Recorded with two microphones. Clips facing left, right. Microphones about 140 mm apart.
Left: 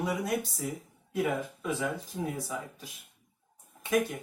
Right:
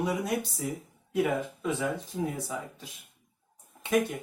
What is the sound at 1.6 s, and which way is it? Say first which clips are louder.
Speech: right 2 dB; 25° right (ahead or behind).